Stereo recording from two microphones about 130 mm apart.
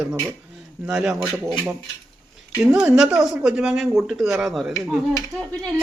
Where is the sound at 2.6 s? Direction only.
5° right (ahead or behind).